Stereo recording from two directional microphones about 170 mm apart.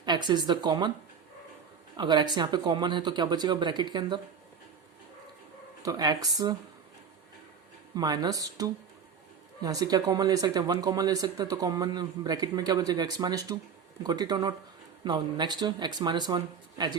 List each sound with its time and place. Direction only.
0.0 s speech: 25° right (ahead or behind)
2.0 s speech: 25° right (ahead or behind)
5.8 s speech: 25° right (ahead or behind)
7.9 s speech: 25° right (ahead or behind)